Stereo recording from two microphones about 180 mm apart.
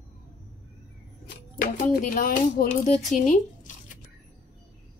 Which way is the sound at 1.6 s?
50° left (ahead or behind).